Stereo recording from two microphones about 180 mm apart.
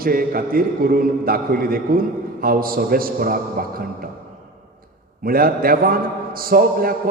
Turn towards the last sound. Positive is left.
turn(degrees=-55)  # may be behind; listen again after turning